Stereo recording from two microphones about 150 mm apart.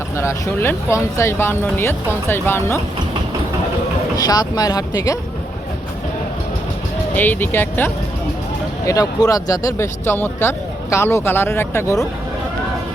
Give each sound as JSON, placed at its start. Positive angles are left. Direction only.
{"t": 0.2, "sound": "speech", "side_deg": 20}
{"t": 4.2, "sound": "speech", "side_deg": 25}
{"t": 7.2, "sound": "speech", "side_deg": 10}
{"t": 8.9, "sound": "speech", "side_deg": 25}